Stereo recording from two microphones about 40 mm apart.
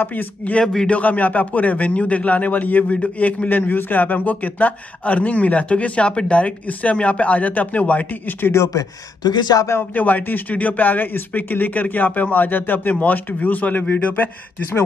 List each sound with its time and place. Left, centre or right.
0.0 s speech: left
0.8 s a man's voice: left
3.4 s a man's voice: left
8.1 s speech: left
9.9 s speech: left